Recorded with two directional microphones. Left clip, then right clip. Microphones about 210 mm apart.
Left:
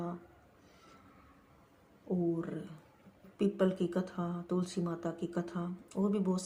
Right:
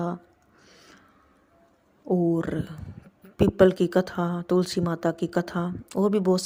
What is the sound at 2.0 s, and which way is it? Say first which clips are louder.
Speech: right 11 dB; 45° right (ahead or behind).